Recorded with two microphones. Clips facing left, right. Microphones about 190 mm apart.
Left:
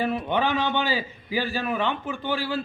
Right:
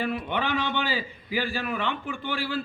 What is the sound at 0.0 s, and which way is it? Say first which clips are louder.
A man's voice: left 4 dB; 15° left (ahead or behind).